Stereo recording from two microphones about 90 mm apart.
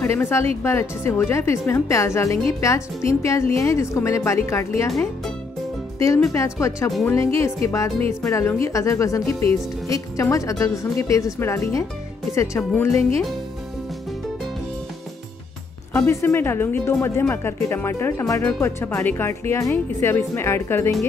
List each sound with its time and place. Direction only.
0.0 s a woman's voice: 25° left (ahead or behind)
5.9 s speech: 35° left (ahead or behind)
15.9 s speech: 30° left (ahead or behind)